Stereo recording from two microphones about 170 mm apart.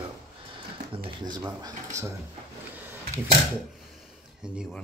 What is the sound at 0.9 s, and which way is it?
Speech, 30° right (ahead or behind).